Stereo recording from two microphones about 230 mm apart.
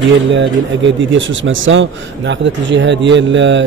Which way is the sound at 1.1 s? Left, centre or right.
Right.